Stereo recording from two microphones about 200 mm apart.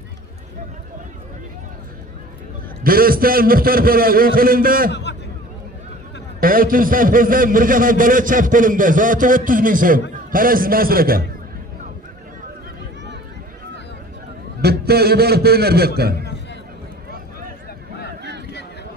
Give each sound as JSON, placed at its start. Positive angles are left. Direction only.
{"t": 2.8, "sound": "a man's voice", "side_deg": -45}
{"t": 6.4, "sound": "a man's voice", "side_deg": -45}
{"t": 14.6, "sound": "a man's voice", "side_deg": -50}